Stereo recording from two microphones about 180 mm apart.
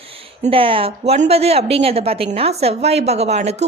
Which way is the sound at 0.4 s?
30° right (ahead or behind).